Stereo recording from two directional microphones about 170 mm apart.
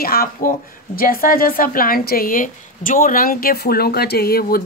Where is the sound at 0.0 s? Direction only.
60° left (ahead or behind).